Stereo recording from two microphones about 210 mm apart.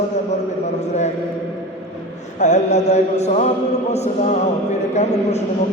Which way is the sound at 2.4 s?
35° left (ahead or behind).